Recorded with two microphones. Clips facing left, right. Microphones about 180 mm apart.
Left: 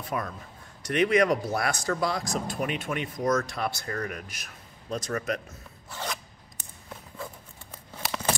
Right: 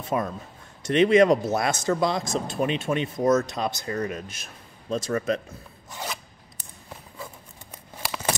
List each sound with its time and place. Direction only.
0.0 s speech: 25° right (ahead or behind)
5.9 s scissors: 15° right (ahead or behind)